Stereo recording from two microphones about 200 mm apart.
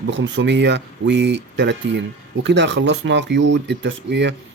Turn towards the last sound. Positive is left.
turn(degrees=-65)  # may be behind; listen again after turning